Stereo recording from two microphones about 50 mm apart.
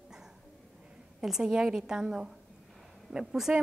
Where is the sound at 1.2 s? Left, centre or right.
Centre.